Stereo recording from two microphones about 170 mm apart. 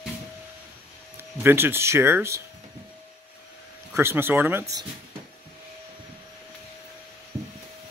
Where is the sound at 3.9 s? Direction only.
15° right (ahead or behind).